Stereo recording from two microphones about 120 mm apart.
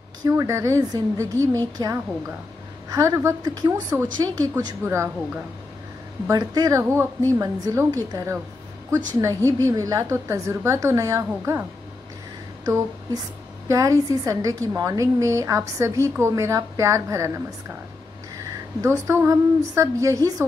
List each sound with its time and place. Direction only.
0.2 s a woman's voice: 25° right (ahead or behind)
1.8 s a woman's voice: 35° right (ahead or behind)
2.9 s a woman's voice: 25° right (ahead or behind)
6.2 s a woman's voice: 30° right (ahead or behind)
6.8 s a woman's voice: 20° right (ahead or behind)
12.6 s a sound: 30° right (ahead or behind)
13.7 s a woman's voice: 30° right (ahead or behind)
18.8 s a woman's voice: 25° right (ahead or behind)